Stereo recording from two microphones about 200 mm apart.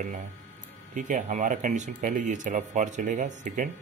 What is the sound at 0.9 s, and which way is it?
Speech, 40° right (ahead or behind).